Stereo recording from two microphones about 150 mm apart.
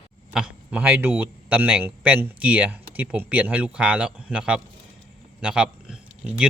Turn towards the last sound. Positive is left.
turn(degrees=-5)  # may be behind; listen again after turning